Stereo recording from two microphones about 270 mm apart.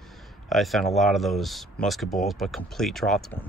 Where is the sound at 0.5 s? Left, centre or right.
Centre.